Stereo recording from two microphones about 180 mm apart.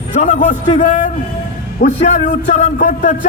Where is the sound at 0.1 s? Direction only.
45° left (ahead or behind).